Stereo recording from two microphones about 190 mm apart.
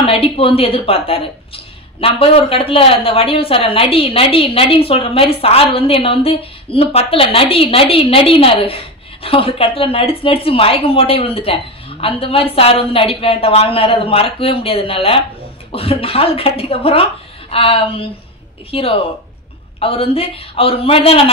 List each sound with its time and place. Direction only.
0.0 s a woman's voice: 30° left (ahead or behind)